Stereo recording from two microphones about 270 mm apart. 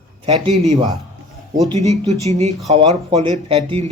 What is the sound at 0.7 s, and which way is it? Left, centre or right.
Speech, centre.